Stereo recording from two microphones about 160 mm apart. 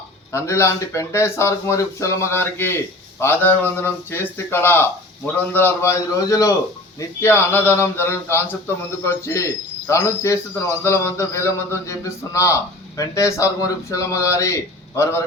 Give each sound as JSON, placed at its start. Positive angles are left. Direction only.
{"t": 0.3, "sound": "speech", "side_deg": 20}